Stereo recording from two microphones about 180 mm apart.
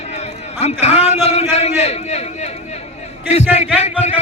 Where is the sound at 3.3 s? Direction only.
40° left (ahead or behind).